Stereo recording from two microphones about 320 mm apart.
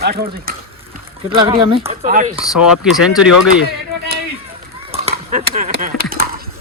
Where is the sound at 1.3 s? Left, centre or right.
Centre.